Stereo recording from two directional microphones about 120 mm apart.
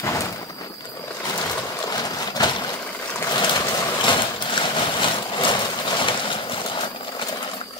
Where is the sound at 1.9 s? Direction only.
35° left (ahead or behind).